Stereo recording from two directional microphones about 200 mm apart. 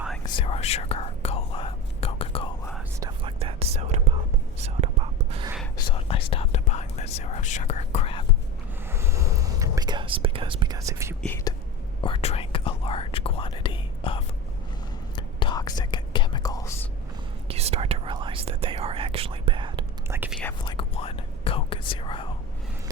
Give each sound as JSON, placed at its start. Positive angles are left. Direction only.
{"t": 0.3, "sound": "whispering", "side_deg": 30}
{"t": 3.0, "sound": "whispering", "side_deg": -25}
{"t": 5.7, "sound": "whispering", "side_deg": 25}
{"t": 8.9, "sound": "whispering", "side_deg": -15}
{"t": 12.0, "sound": "whispering", "side_deg": 30}
{"t": 17.5, "sound": "whispering", "side_deg": -30}
{"t": 20.1, "sound": "whispering", "side_deg": -10}
{"t": 20.7, "sound": "whispering", "side_deg": 25}